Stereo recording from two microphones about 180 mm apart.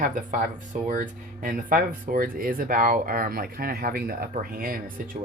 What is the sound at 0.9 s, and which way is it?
Speech, 45° right (ahead or behind).